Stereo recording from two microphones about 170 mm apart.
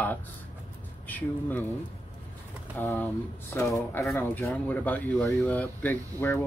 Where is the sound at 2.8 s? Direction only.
10° left (ahead or behind).